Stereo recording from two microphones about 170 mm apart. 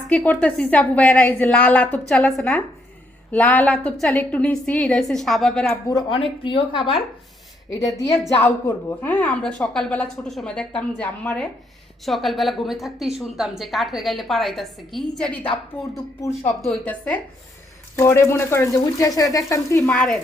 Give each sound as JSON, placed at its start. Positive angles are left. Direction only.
{"t": 0.1, "sound": "a woman's voice", "side_deg": 5}
{"t": 5.6, "sound": "a woman's voice", "side_deg": 15}
{"t": 6.4, "sound": "a woman's voice", "side_deg": 30}
{"t": 15.8, "sound": "a woman's voice", "side_deg": 20}
{"t": 16.6, "sound": "a woman's voice", "side_deg": 5}
{"t": 19.9, "sound": "a woman's voice", "side_deg": 5}